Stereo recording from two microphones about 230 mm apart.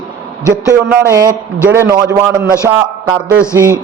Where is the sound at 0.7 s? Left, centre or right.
Centre.